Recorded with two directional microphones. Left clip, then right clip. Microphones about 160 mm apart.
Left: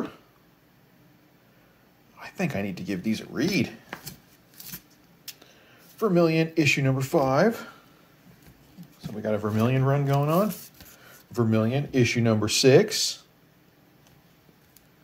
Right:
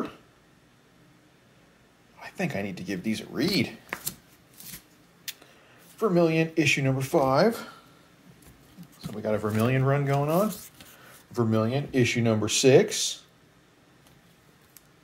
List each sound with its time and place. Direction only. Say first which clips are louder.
2.1 s speech: left 1 dB; 20° left (ahead or behind)
5.9 s speech: left 1 dB; 25° left (ahead or behind); by 7.8 s 5° left (ahead or behind)
9.0 s speech: even; 5° left (ahead or behind)
10.1 s speech: left 1 dB; 25° left (ahead or behind)